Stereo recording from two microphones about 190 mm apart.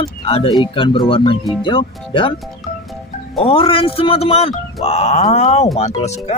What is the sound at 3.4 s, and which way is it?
Speech, 30° left (ahead or behind).